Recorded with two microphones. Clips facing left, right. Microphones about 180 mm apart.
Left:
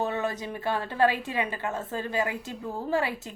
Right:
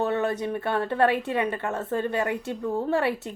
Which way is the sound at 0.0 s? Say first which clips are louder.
Right 4 dB; 60° right (ahead or behind).